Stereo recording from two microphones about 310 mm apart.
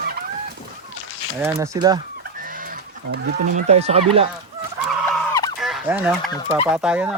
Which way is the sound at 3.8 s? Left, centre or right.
Centre.